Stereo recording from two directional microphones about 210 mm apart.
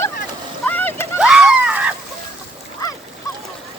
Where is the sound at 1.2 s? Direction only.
5° right (ahead or behind).